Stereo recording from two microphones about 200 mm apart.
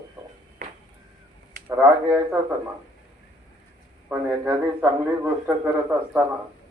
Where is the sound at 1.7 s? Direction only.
10° right (ahead or behind).